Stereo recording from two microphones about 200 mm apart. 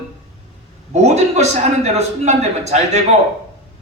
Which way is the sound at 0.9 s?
35° right (ahead or behind).